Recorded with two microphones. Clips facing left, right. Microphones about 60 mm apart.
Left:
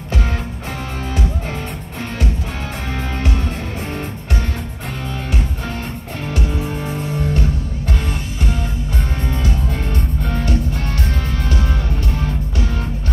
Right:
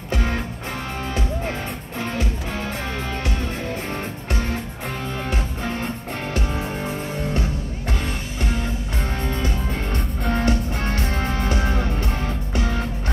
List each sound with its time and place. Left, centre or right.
10.3 s music: right